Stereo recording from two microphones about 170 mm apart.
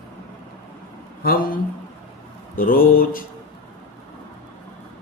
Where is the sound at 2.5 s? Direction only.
55° left (ahead or behind).